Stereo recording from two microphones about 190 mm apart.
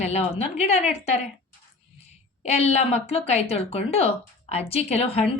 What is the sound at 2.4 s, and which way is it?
A woman's voice, 35° left (ahead or behind).